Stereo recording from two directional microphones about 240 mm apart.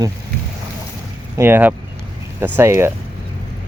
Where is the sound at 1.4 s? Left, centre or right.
Centre.